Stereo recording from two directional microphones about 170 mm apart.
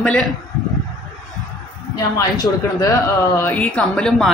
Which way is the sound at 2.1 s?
20° left (ahead or behind).